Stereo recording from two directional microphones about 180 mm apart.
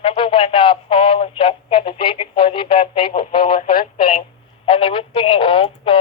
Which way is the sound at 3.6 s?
55° left (ahead or behind).